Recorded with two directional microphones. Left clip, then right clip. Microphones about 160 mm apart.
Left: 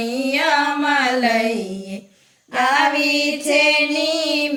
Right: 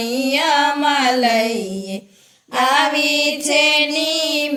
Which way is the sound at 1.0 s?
40° right (ahead or behind).